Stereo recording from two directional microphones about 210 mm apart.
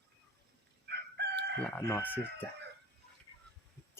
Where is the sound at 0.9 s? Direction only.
50° right (ahead or behind).